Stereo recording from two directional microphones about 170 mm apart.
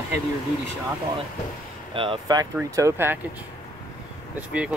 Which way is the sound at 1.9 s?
25° right (ahead or behind).